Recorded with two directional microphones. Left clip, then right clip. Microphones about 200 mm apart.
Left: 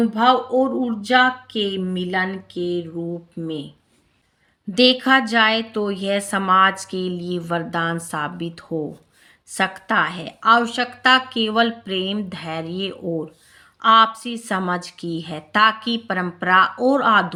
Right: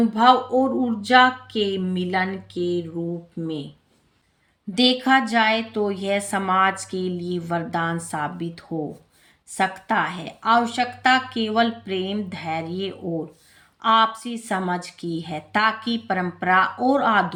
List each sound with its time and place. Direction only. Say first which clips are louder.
0.0 s speech: even; 10° left (ahead or behind)
4.7 s a woman's voice: left 3 dB; 20° left (ahead or behind)